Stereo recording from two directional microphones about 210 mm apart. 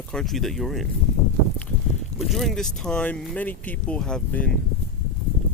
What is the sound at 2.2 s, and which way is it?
Speech, centre (ahead or behind).